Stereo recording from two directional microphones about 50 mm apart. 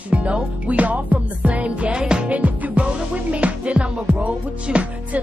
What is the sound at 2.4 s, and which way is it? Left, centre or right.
Music, right.